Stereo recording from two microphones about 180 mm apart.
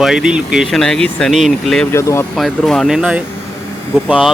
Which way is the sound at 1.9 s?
15° left (ahead or behind).